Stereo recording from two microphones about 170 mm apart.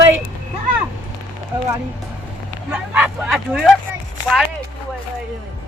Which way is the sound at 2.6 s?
10° right (ahead or behind).